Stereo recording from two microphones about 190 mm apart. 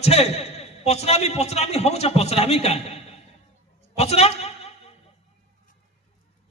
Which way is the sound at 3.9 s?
35° left (ahead or behind).